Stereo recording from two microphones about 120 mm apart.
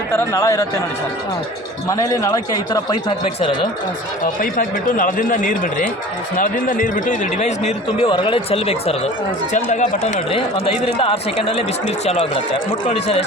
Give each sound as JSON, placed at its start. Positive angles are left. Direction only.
{"t": 0.1, "sound": "a man's voice", "side_deg": 25}
{"t": 1.9, "sound": "a man's voice", "side_deg": 25}
{"t": 5.3, "sound": "speech", "side_deg": 90}
{"t": 8.0, "sound": "speech", "side_deg": 45}
{"t": 10.3, "sound": "speech", "side_deg": 50}